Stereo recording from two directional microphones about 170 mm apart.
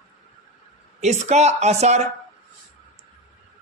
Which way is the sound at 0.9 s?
40° right (ahead or behind).